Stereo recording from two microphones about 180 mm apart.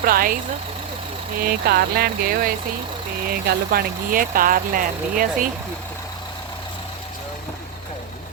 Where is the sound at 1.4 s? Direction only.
55° right (ahead or behind).